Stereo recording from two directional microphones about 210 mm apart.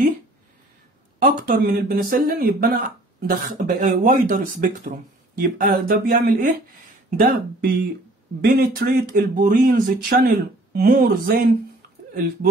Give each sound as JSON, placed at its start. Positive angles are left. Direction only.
{"t": 1.2, "sound": "speech", "side_deg": -45}